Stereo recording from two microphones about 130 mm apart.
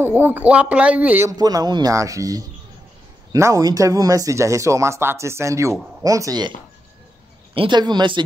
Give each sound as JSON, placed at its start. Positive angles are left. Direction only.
{"t": 0.0, "sound": "a man's voice", "side_deg": -15}
{"t": 1.3, "sound": "speech", "side_deg": -30}
{"t": 7.5, "sound": "speech", "side_deg": -40}